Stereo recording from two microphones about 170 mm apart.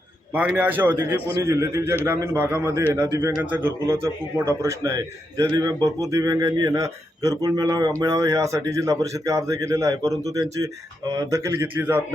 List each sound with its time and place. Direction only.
0.3 s a man's voice: 10° right (ahead or behind)